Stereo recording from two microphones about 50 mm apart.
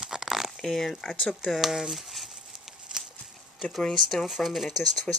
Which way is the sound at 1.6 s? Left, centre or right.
Centre.